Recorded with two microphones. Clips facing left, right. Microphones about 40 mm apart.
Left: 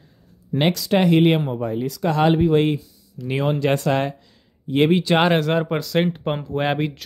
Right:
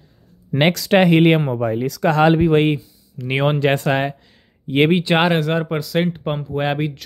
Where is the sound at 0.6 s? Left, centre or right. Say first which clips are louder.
Right 4 dB; right.